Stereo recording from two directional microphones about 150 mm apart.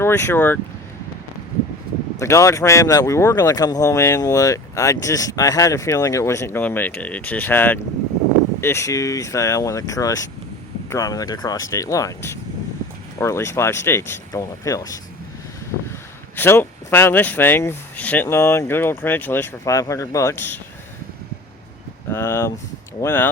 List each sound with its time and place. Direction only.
0.0 s speech: 15° left (ahead or behind)
2.1 s speech: 20° left (ahead or behind)
22.1 s speech: 15° left (ahead or behind)